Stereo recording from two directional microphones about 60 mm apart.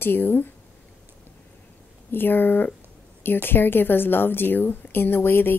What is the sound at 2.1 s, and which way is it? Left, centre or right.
Speech, left.